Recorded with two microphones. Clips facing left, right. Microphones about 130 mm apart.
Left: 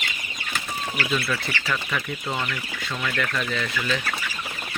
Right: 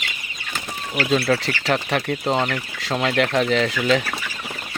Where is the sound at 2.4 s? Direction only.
80° right.